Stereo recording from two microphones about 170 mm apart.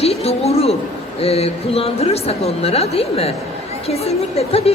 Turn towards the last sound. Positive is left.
turn(degrees=35)  # may be behind; listen again after turning